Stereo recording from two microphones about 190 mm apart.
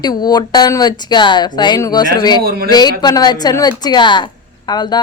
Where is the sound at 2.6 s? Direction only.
20° left (ahead or behind).